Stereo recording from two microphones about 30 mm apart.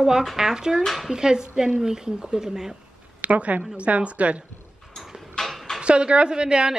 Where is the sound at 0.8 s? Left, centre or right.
Centre.